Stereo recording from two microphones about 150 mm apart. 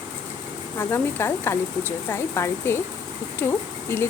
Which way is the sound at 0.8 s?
15° left (ahead or behind).